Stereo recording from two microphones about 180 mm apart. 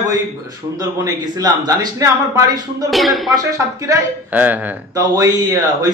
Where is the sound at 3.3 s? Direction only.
20° right (ahead or behind).